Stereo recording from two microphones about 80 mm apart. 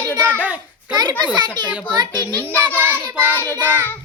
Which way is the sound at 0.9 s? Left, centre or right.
Right.